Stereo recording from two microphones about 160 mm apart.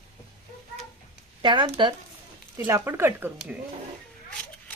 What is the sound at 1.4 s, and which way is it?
Speech, 30° right (ahead or behind).